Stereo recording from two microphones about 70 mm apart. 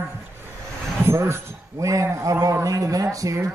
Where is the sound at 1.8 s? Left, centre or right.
Right.